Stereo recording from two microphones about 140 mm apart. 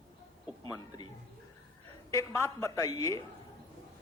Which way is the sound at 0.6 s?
25° left (ahead or behind).